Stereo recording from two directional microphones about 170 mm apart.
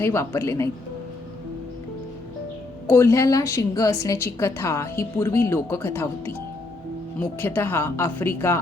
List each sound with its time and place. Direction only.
0.0 s speech: 15° left (ahead or behind)
2.8 s speech: 15° left (ahead or behind)